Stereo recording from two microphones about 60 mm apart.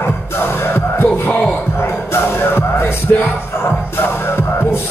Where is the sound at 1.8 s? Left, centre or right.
Left.